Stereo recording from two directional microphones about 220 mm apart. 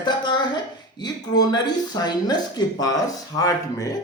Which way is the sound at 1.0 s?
20° left (ahead or behind).